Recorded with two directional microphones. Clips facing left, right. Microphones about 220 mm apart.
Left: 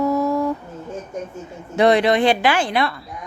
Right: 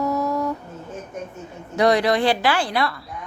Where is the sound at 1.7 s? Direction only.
25° left (ahead or behind).